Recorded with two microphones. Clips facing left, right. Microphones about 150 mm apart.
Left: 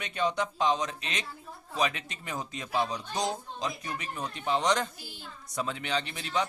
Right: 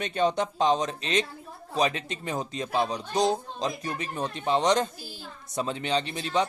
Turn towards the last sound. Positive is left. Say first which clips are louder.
# right 4 dB
turn(degrees=-25)  # may be behind; listen again after turning